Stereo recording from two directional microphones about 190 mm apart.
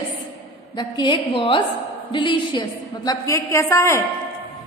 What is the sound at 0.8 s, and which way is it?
A woman's voice, 25° left (ahead or behind).